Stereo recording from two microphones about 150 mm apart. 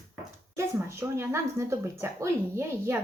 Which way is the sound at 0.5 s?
20° right (ahead or behind).